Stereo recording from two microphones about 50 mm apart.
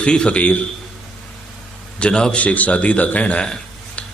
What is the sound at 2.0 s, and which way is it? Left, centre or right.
Speech, centre.